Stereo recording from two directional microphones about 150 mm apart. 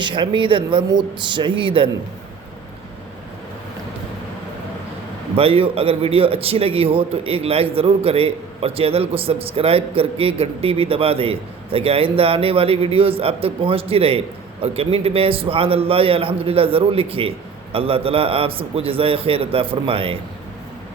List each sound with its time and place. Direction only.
0.0 s a man's voice: 35° right (ahead or behind)
5.4 s a man's voice: 40° right (ahead or behind)